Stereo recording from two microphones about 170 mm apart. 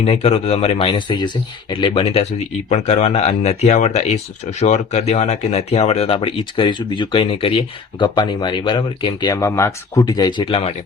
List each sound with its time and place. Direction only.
0.0 s speech: 35° left (ahead or behind)